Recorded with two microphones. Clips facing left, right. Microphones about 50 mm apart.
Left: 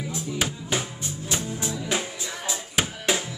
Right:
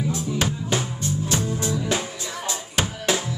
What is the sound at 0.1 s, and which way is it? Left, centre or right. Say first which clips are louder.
Music: right 4 dB; centre.